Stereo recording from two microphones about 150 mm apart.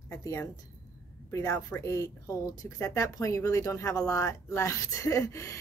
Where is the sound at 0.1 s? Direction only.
20° left (ahead or behind).